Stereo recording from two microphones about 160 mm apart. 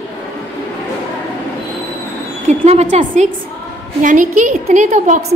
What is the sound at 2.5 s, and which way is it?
A woman's voice, 45° right (ahead or behind).